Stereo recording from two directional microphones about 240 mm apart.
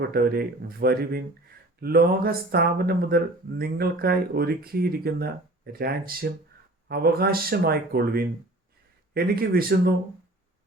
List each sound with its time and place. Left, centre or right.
0.1 s speech: right